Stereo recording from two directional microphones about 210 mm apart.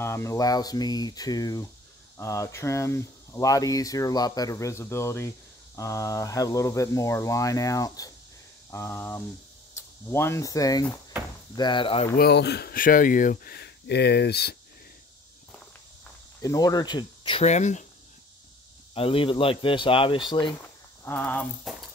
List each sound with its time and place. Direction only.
0.0 s speech: 15° left (ahead or behind)
12.2 s speech: 50° left (ahead or behind)
16.3 s speech: 15° left (ahead or behind); by 17.8 s 35° left (ahead or behind)
18.9 s speech: 25° left (ahead or behind)
21.0 s speech: 10° left (ahead or behind)